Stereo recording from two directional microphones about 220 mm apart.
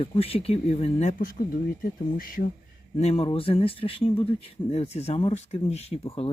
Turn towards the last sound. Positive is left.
turn(degrees=25)  # may be behind; listen again after turning